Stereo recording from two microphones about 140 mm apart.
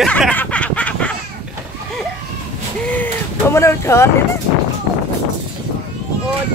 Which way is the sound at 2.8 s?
10° left (ahead or behind).